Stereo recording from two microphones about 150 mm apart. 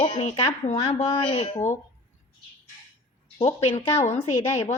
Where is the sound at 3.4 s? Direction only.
40° left (ahead or behind).